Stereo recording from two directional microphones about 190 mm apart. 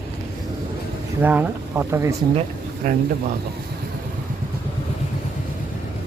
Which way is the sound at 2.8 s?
45° right (ahead or behind).